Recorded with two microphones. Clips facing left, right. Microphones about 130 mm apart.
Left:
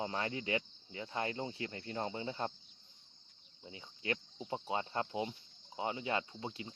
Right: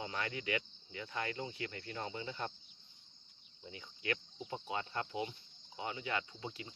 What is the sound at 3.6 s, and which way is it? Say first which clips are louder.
Cricket: even; 25° left (ahead or behind).